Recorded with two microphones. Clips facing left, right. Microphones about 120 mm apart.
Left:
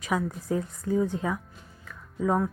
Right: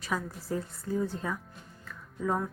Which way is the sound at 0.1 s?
20° left (ahead or behind).